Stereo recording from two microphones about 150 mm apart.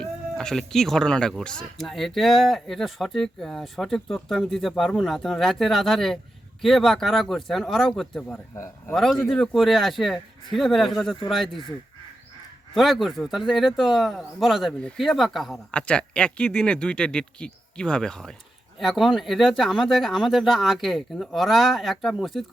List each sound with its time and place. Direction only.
0.0 s speech: 5° left (ahead or behind)
8.5 s a man's voice: 20° left (ahead or behind)
9.0 s speech: centre (ahead or behind)
12.7 s speech: centre (ahead or behind)